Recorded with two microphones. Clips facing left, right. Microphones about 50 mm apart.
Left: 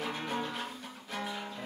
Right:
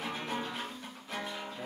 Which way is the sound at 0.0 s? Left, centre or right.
Centre.